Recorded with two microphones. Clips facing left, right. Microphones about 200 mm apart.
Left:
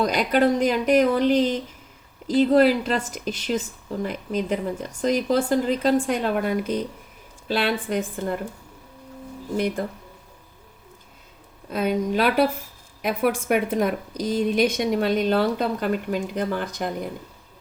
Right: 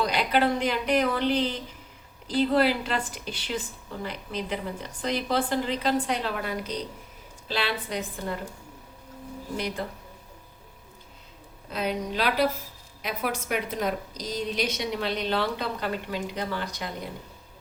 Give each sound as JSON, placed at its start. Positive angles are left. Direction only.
{"t": 0.0, "sound": "a woman's voice", "side_deg": 45}
{"t": 9.6, "sound": "a woman's voice", "side_deg": 50}
{"t": 11.7, "sound": "a woman's voice", "side_deg": 50}